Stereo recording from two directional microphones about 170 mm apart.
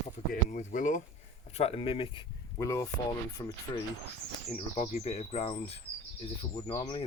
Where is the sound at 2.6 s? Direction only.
15° left (ahead or behind).